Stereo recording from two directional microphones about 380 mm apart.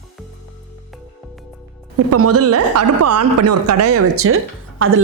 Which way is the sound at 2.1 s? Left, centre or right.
Right.